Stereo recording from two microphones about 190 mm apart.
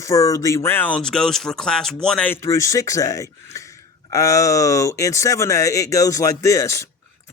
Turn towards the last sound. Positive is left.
turn(degrees=15)  # may be behind; listen again after turning